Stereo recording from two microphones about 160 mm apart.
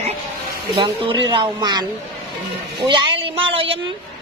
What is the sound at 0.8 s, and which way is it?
A woman's voice, 30° right (ahead or behind).